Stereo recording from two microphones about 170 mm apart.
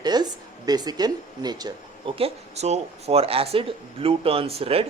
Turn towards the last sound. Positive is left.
turn(degrees=-35)  # may be behind; listen again after turning